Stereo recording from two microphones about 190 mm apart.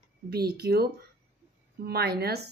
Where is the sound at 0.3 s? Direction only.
55° right (ahead or behind).